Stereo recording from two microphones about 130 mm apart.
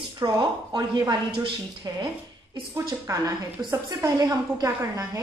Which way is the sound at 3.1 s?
25° right (ahead or behind).